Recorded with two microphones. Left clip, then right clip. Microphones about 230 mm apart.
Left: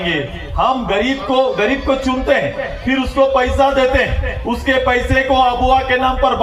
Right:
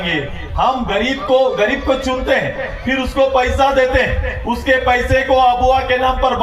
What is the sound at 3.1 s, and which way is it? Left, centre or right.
A man's voice, left.